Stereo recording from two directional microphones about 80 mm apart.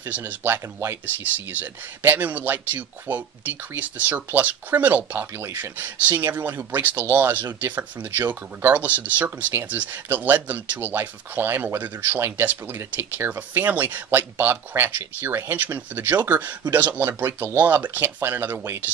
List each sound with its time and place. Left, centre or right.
0.0 s speech: right